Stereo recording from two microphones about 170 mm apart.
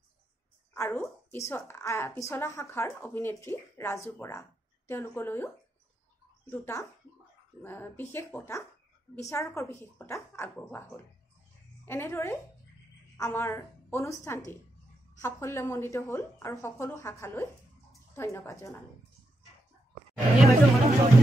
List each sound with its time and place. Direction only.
0.7 s a woman's voice: 15° left (ahead or behind)
6.5 s a woman's voice: 15° left (ahead or behind)
20.3 s chatter: centre (ahead or behind)